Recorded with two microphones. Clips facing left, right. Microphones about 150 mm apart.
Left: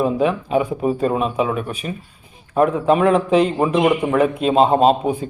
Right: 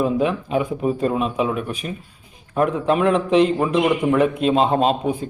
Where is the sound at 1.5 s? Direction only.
40° left (ahead or behind).